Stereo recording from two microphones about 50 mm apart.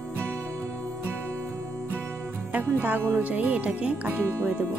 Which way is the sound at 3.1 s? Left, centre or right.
Right.